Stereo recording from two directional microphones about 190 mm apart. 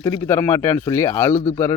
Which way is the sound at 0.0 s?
15° left (ahead or behind).